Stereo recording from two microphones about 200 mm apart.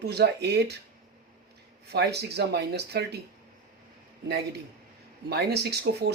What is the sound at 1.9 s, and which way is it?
Speech, 55° right (ahead or behind).